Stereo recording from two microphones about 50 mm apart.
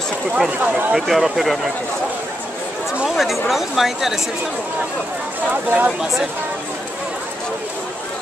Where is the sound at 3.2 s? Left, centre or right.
Centre.